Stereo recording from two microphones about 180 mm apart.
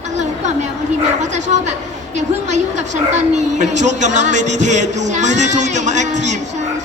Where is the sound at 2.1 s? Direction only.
40° right (ahead or behind).